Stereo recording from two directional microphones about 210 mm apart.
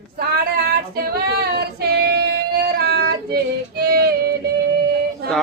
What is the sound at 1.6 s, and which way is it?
Female singing, 50° right (ahead or behind).